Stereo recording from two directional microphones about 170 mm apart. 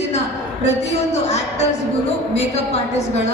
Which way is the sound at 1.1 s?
40° left (ahead or behind).